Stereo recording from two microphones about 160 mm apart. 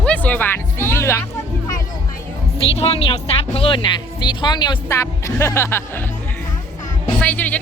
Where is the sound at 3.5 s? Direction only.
35° left (ahead or behind); by 5.8 s 15° left (ahead or behind).